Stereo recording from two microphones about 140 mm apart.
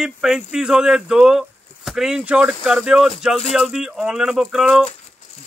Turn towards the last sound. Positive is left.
turn(degrees=-5)  # may be behind; listen again after turning